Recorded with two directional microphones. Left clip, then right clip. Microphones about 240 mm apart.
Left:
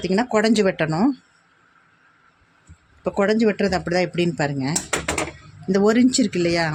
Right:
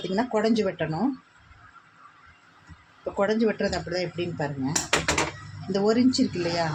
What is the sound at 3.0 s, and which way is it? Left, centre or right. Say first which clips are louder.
Speech: left 5 dB; left.